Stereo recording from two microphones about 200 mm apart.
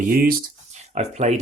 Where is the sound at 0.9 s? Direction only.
35° right (ahead or behind).